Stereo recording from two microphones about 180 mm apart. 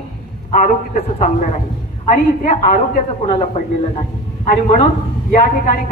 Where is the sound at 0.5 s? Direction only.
45° left (ahead or behind).